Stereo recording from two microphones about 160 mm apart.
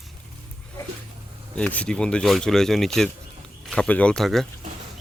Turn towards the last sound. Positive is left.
turn(degrees=0)  # may be behind; listen again after turning